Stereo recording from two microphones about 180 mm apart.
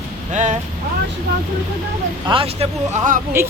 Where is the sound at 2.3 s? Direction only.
30° right (ahead or behind).